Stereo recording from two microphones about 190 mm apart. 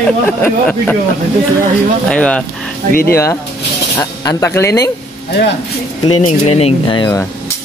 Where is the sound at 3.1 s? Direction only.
15° left (ahead or behind).